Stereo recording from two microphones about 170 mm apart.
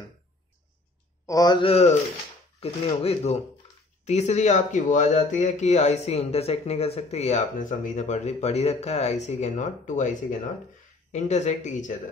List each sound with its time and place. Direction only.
1.2 s a man's voice: 20° left (ahead or behind); by 12.0 s 45° left (ahead or behind)